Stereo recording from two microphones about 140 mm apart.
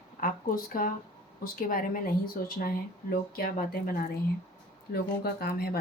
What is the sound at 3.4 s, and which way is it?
Speech, 90° left.